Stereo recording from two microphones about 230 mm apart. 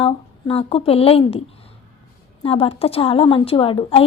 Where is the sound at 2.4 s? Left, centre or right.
Left.